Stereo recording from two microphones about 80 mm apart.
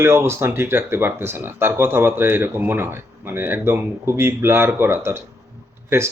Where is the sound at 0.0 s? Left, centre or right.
Right.